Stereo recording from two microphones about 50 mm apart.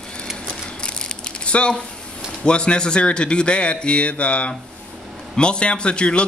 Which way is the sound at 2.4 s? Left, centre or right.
Centre.